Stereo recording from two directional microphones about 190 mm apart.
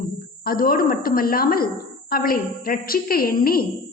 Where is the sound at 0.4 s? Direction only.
50° left (ahead or behind).